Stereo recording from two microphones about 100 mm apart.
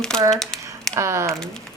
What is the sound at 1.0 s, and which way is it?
Speech, 30° right (ahead or behind).